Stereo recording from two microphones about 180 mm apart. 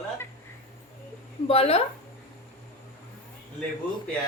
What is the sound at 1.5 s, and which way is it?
Speech, 35° left (ahead or behind).